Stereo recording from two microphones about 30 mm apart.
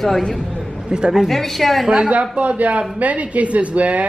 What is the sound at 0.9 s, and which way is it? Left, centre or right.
Speech, right.